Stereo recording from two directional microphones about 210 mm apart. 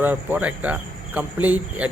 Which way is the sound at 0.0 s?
10° right (ahead or behind).